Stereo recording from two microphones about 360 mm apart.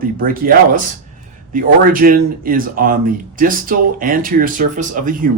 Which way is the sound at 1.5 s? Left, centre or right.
Right.